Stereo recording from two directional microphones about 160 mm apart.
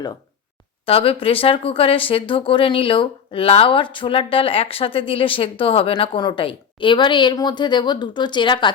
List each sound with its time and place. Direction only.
0.9 s speech: 35° left (ahead or behind)